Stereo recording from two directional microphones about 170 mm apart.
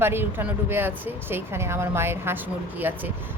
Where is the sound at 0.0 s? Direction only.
15° right (ahead or behind).